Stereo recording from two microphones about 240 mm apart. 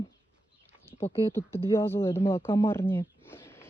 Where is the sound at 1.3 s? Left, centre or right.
Centre.